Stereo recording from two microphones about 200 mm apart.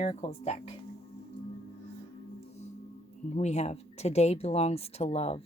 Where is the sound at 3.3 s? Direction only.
35° left (ahead or behind).